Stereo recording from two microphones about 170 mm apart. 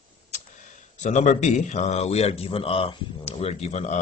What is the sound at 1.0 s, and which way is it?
Speech, 45° left (ahead or behind).